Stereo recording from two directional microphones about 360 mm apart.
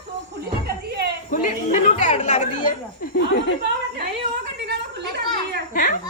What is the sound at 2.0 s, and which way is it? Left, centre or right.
Speech, centre.